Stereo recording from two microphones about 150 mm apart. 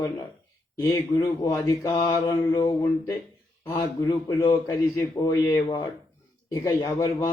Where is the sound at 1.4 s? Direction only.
20° left (ahead or behind).